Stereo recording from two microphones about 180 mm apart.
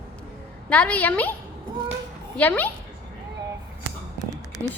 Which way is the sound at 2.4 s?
10° left (ahead or behind).